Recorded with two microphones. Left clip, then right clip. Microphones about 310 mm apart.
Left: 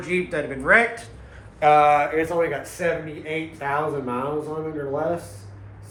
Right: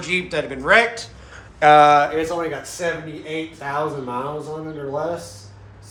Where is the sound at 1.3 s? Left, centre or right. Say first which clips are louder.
Right 4 dB; right.